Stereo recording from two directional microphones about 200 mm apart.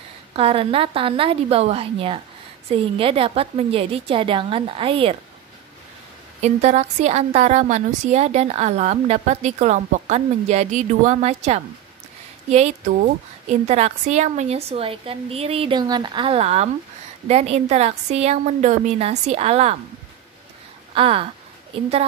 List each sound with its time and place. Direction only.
0.3 s a woman's voice: 30° right (ahead or behind)
6.4 s a woman's voice: 35° right (ahead or behind)
20.9 s a woman's voice: 25° right (ahead or behind)